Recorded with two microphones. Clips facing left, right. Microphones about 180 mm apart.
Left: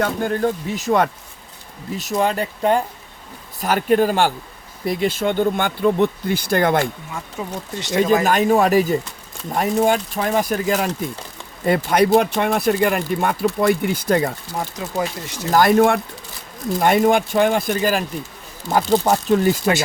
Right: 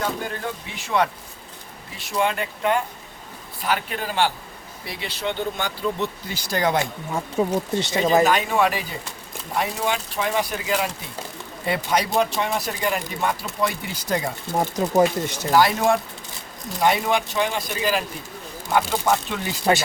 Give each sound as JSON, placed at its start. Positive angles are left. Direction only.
{"t": 0.0, "sound": "speech", "side_deg": 45}
{"t": 7.1, "sound": "speech", "side_deg": -30}
{"t": 7.9, "sound": "speech", "side_deg": 45}
{"t": 14.6, "sound": "speech", "side_deg": -40}
{"t": 15.5, "sound": "speech", "side_deg": 50}